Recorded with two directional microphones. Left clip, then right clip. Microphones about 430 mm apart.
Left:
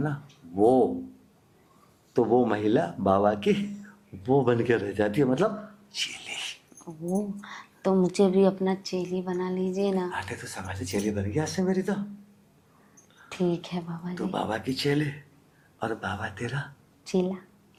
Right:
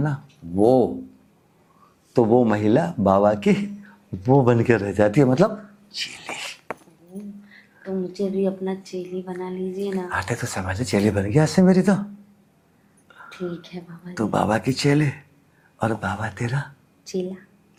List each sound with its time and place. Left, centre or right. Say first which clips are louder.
0.0 s a sound: right 4 dB; right
2.1 s speech: right 5 dB; right
5.9 s a sound: right 2 dB; centre
7.4 s a woman's voice: left 5 dB; left
10.1 s speech: right 8 dB; right
13.3 s a woman's voice: left 3 dB; left
14.2 s speech: right 9 dB; right